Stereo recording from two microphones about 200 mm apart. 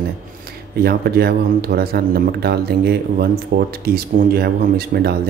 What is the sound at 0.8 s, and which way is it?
Speech, 50° right (ahead or behind).